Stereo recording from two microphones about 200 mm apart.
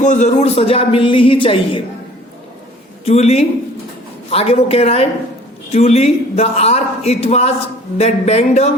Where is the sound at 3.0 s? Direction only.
30° left (ahead or behind).